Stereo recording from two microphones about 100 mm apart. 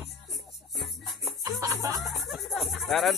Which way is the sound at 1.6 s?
35° right (ahead or behind).